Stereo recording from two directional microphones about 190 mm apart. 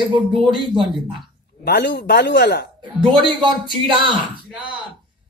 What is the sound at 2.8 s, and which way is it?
Speech, 25° right (ahead or behind).